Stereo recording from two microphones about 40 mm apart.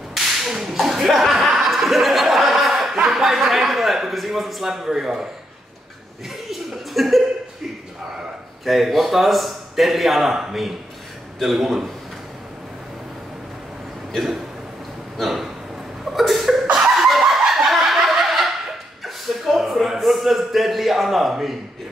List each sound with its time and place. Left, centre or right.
0.1 s whip: centre
1.6 s chuckle: centre
3.1 s a sound: centre
4.7 s speech: centre
6.2 s chuckle: centre
8.6 s a man's voice: centre
14.1 s a man's voice: centre
15.1 s dog: centre
16.1 s a sound: centre
16.8 s snicker: centre
19.0 s a sound: centre